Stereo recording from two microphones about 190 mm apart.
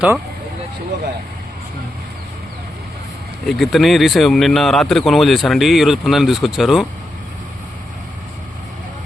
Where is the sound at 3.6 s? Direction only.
Centre (ahead or behind).